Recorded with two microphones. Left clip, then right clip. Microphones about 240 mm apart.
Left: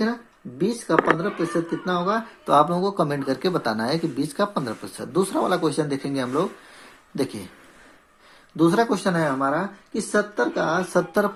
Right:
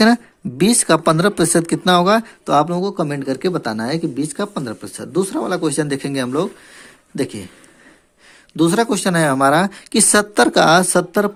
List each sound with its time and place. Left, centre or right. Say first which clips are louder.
0.6 s speech: right 6 dB; right
2.5 s speech: right 2 dB; right
8.5 s speech: right 3 dB; right